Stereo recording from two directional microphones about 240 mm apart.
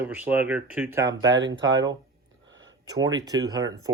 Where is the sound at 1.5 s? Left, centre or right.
Right.